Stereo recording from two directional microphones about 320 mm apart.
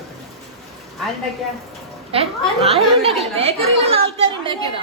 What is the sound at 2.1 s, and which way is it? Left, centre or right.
Speech, centre.